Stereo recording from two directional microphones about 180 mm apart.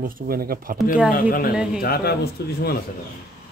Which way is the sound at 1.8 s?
60° left (ahead or behind).